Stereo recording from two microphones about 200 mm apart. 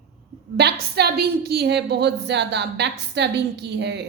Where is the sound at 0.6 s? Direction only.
55° right (ahead or behind).